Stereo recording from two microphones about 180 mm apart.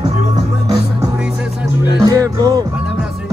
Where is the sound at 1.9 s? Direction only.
20° right (ahead or behind).